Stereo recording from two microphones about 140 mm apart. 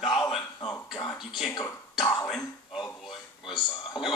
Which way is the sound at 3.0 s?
Centre (ahead or behind).